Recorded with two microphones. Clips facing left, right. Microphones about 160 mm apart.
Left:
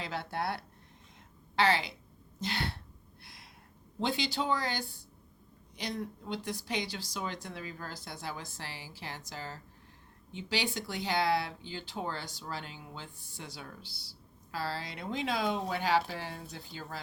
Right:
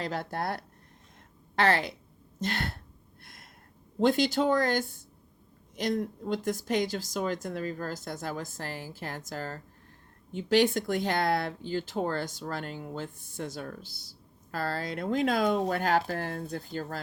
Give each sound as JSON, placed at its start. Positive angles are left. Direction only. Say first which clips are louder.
{"t": 0.0, "sound": "speech", "louder": "right 3 dB", "side_deg": -45}
{"t": 4.2, "sound": "speech", "louder": "right 7 dB", "side_deg": -45}